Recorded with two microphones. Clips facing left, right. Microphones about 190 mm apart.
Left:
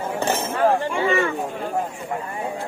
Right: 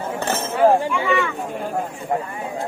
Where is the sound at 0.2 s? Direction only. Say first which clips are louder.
Left 2 dB; 15° left (ahead or behind).